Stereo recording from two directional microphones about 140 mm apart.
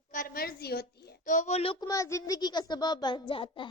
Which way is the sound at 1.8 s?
25° left (ahead or behind).